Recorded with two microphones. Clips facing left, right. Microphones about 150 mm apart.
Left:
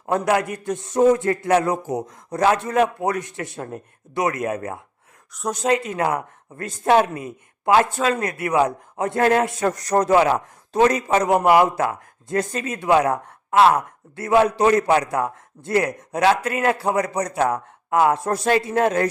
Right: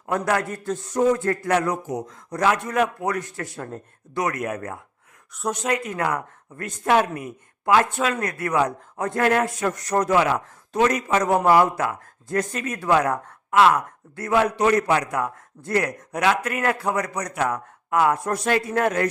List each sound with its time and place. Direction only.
0.0 s speech: 25° left (ahead or behind)